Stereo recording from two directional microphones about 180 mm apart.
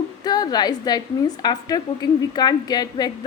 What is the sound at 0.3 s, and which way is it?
A woman's voice, 20° left (ahead or behind).